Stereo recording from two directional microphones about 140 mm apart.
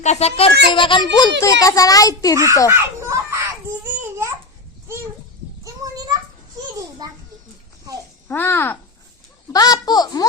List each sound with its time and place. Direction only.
0.0 s a child's voice: 50° left (ahead or behind)
0.7 s a child's voice: 35° left (ahead or behind)
2.3 s a child's voice: 20° right (ahead or behind)
2.6 s a sound: 20° right (ahead or behind)
3.8 s babbling: 20° right (ahead or behind)
5.6 s children playing: 25° right (ahead or behind)
8.3 s a child's voice: 15° left (ahead or behind)
9.5 s a child's voice: 30° left (ahead or behind)